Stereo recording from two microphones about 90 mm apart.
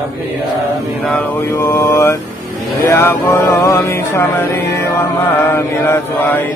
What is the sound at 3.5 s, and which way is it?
Music, 30° left (ahead or behind).